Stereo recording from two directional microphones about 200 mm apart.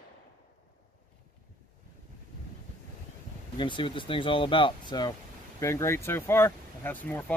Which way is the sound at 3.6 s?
25° left (ahead or behind).